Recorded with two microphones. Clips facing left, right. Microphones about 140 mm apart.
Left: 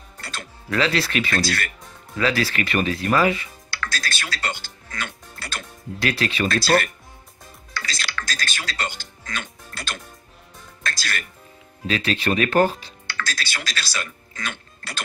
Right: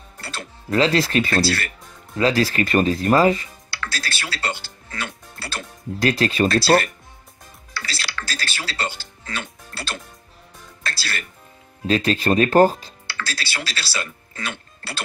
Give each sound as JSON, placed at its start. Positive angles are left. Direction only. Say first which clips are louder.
{"t": 0.2, "sound": "speech", "louder": "right 2 dB", "side_deg": -30}
{"t": 7.7, "sound": "music", "louder": "even", "side_deg": -30}
{"t": 11.9, "sound": "speech", "louder": "right 4 dB", "side_deg": -40}
{"t": 14.3, "sound": "music", "louder": "right 1 dB", "side_deg": -30}